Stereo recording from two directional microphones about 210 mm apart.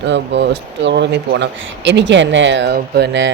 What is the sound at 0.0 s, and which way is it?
A woman's voice, 55° right (ahead or behind).